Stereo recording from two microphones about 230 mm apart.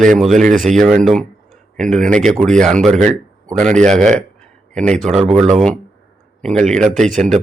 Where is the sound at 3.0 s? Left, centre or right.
Right.